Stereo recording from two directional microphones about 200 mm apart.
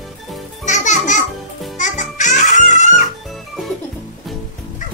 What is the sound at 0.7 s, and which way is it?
Music, 40° left (ahead or behind).